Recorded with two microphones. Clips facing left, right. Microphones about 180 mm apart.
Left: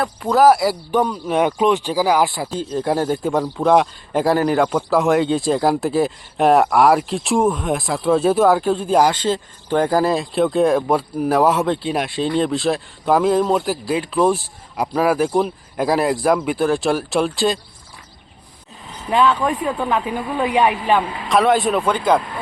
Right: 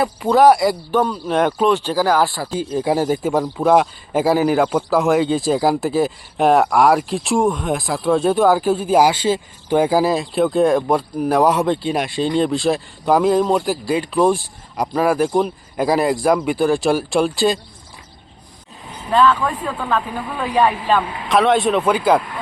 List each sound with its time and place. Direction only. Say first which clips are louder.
0.0 s speech: right 1 dB; 5° right (ahead or behind)
0.9 s speech: even; 15° left (ahead or behind)
2.5 s speech: right 1 dB; 5° right (ahead or behind)
19.1 s speech: right 1 dB; 15° left (ahead or behind)
21.2 s speech: right 1 dB; centre (ahead or behind)